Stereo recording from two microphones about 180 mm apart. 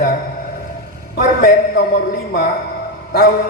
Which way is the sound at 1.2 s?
55° left (ahead or behind).